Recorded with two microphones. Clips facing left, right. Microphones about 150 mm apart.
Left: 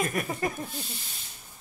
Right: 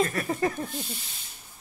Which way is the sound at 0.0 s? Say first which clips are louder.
Right 3 dB; 15° left (ahead or behind).